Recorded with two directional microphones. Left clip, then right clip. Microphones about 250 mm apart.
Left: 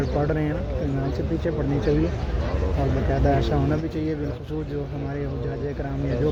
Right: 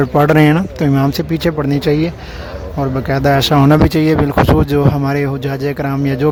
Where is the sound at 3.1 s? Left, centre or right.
Right.